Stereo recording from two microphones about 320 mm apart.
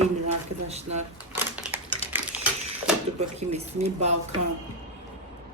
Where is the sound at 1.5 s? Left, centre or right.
Centre.